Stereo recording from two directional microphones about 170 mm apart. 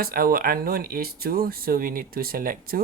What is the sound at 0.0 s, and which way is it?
Speech, 60° right (ahead or behind).